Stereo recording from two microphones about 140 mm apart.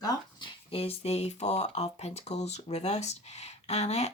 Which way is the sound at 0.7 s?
45° left (ahead or behind).